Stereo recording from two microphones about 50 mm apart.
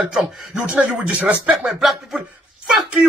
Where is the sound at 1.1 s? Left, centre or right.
Right.